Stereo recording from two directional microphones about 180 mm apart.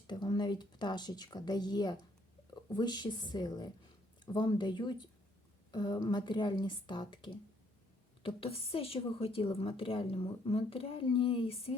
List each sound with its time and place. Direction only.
0.1 s a woman's voice: 25° left (ahead or behind)